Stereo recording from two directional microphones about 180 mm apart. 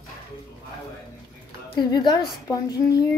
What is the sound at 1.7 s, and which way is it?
A woman's voice, 25° left (ahead or behind).